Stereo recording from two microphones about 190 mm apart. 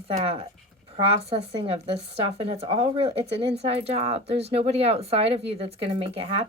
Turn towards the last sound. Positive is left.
turn(degrees=-30)  # may be behind; listen again after turning